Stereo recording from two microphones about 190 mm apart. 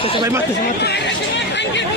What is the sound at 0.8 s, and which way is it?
Chatter, 65° left (ahead or behind).